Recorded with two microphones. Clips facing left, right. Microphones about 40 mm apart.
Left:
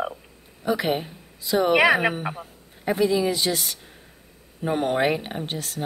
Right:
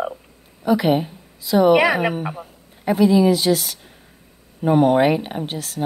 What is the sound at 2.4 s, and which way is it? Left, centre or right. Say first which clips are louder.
A woman's voice: right 3 dB; centre.